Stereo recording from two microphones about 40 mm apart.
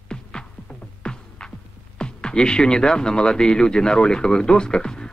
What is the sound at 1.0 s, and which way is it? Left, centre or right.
Speech, centre.